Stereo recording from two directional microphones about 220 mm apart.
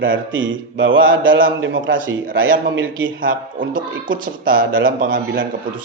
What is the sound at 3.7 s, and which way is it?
A man's voice, 40° right (ahead or behind).